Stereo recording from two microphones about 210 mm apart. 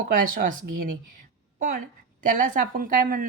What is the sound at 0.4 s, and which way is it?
A woman's voice, 40° right (ahead or behind).